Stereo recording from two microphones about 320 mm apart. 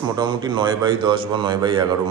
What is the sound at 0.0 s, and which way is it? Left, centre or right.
A man's voice, centre.